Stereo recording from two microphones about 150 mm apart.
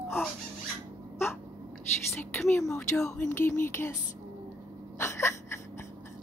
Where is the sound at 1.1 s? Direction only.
15° left (ahead or behind).